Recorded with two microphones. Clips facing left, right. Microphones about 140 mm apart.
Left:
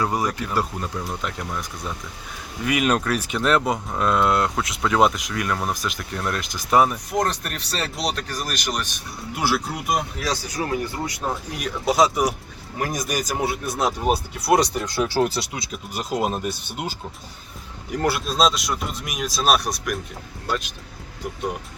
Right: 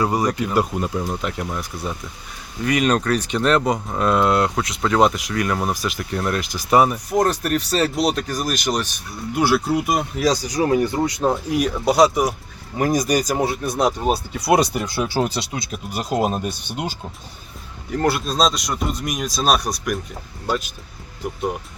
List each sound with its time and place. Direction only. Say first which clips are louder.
0.0 s speech: right 3 dB; centre (ahead or behind)
0.3 s speech: right 5 dB; 15° right (ahead or behind)
1.2 s speech: right 3 dB; 5° right (ahead or behind)
2.6 s speech: right 3 dB; 5° left (ahead or behind); by 8.4 s 10° right (ahead or behind)
8.6 s speech: right 5 dB; 40° right (ahead or behind)
9.3 s speech: right 6 dB; centre (ahead or behind)
10.4 s speech: right 7 dB; 20° right (ahead or behind)
11.5 s speech: right 2 dB; centre (ahead or behind)
14.5 s speech: right 1 dB; 5° right (ahead or behind)
15.9 s speech: right 3 dB; centre (ahead or behind)
17.9 s speech: right 2 dB; 5° left (ahead or behind)